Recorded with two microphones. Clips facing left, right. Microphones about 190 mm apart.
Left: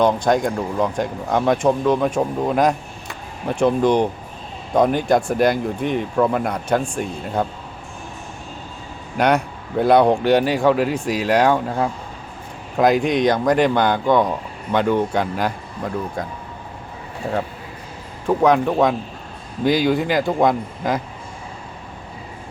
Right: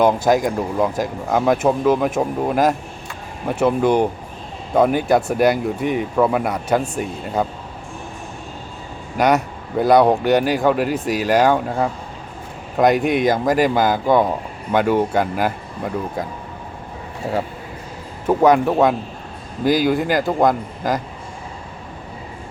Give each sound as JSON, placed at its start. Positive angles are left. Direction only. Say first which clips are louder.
{"t": 0.0, "sound": "a man's voice", "louder": "right 1 dB", "side_deg": -5}
{"t": 9.1, "sound": "a man's voice", "louder": "right 1 dB", "side_deg": 0}
{"t": 18.4, "sound": "speech", "louder": "right 2 dB", "side_deg": -5}